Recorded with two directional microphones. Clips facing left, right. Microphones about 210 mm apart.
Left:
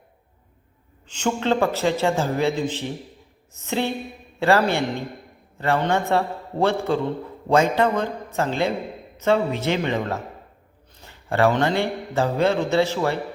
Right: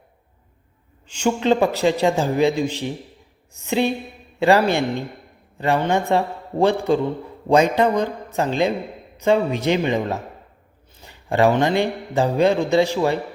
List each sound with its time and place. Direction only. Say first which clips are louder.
1.0 s a man's voice: right 4 dB; 10° right (ahead or behind)